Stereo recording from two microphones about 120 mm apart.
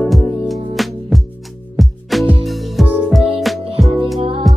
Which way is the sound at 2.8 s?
15° right (ahead or behind).